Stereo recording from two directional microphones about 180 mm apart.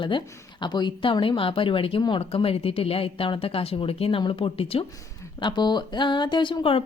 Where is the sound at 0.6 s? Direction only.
25° left (ahead or behind).